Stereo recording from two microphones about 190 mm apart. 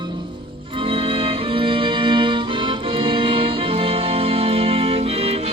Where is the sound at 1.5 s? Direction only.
25° right (ahead or behind).